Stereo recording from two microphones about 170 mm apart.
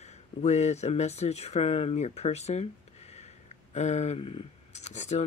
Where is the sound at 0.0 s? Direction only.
40° left (ahead or behind).